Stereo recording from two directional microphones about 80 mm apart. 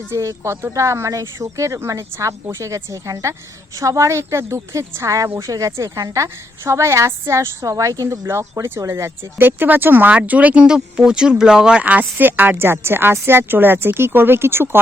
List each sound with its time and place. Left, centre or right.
0.1 s a woman's voice: right